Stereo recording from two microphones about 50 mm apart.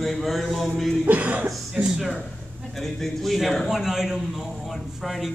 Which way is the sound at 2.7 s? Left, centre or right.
Centre.